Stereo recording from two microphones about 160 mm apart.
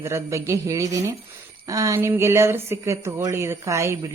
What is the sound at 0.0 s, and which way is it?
Speech, 20° right (ahead or behind).